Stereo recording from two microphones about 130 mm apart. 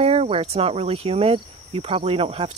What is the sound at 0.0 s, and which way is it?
Cricket, 50° right (ahead or behind).